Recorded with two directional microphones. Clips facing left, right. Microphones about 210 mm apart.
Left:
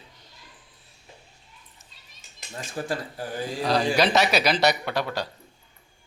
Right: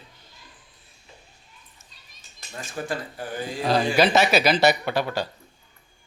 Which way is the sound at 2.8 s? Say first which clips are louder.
Even; 35° left (ahead or behind).